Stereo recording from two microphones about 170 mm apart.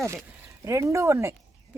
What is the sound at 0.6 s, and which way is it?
Speech, 15° right (ahead or behind).